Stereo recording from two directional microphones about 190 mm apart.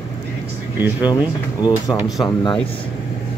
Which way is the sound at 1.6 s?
20° left (ahead or behind).